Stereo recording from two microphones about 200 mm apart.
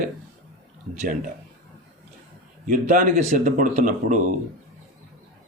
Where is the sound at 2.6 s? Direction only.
40° right (ahead or behind).